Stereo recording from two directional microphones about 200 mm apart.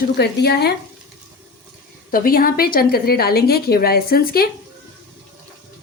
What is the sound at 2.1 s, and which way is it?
Speech, 45° left (ahead or behind).